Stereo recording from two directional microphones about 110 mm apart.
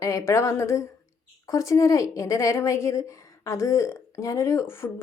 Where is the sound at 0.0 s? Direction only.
25° left (ahead or behind).